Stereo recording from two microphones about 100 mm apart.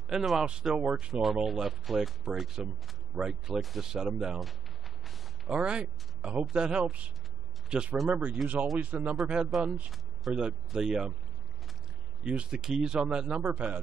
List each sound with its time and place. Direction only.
0.1 s speech: centre (ahead or behind)
5.0 s a sound: 5° right (ahead or behind)
6.4 s speech: 10° right (ahead or behind)
12.2 s speech: 10° right (ahead or behind)